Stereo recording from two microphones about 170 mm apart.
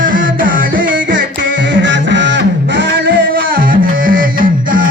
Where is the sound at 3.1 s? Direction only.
55° right (ahead or behind).